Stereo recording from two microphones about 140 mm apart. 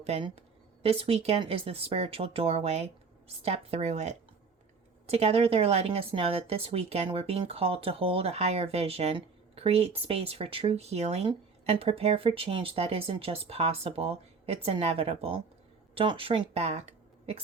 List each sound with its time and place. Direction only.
0.0 s a woman's voice: 50° right (ahead or behind)